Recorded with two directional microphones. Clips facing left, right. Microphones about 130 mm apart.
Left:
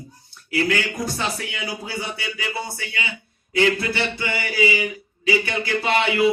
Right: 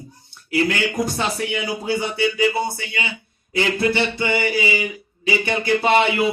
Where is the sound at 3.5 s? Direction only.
25° right (ahead or behind).